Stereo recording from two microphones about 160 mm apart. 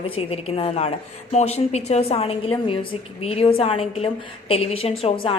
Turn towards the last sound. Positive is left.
turn(degrees=35)  # may be behind; listen again after turning